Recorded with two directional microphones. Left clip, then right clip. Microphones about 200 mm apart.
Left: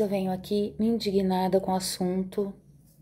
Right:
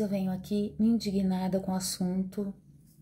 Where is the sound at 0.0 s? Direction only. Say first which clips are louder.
Left 6 dB; 15° right (ahead or behind).